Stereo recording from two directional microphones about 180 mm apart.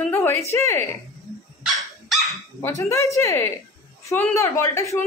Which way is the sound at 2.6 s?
15° left (ahead or behind).